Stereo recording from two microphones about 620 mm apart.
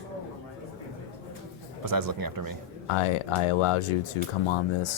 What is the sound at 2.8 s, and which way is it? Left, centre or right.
Speech, left.